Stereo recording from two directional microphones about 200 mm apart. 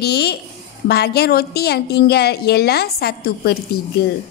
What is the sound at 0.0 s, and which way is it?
A woman's voice, 55° left (ahead or behind).